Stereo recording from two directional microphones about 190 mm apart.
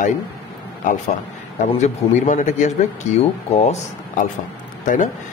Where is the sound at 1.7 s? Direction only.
40° left (ahead or behind).